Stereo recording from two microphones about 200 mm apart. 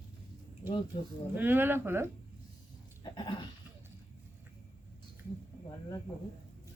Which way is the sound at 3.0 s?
25° left (ahead or behind).